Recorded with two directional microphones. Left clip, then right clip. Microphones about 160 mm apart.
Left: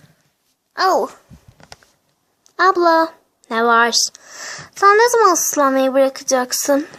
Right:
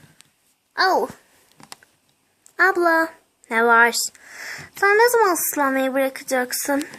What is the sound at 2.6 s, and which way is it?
A child's voice, 20° left (ahead or behind).